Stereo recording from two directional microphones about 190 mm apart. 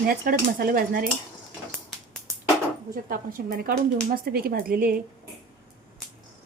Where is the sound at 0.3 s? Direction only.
50° right (ahead or behind).